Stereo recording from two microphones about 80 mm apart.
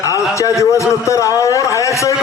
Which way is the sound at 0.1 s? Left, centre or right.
Left.